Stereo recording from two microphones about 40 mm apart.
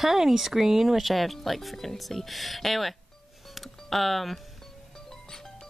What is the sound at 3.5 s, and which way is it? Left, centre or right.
Music, centre.